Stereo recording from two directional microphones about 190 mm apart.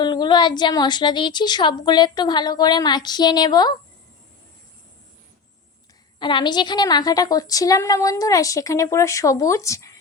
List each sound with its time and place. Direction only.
0.0 s a woman's voice: 25° left (ahead or behind)
6.1 s a woman's voice: 25° left (ahead or behind)